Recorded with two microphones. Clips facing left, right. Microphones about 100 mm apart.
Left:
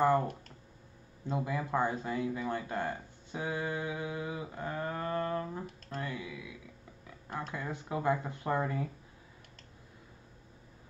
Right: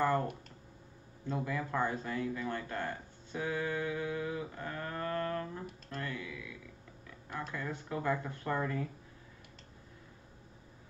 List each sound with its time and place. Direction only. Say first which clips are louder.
0.0 s speech: left 3 dB; 20° left (ahead or behind)
7.5 s speech: left 2 dB; 20° left (ahead or behind)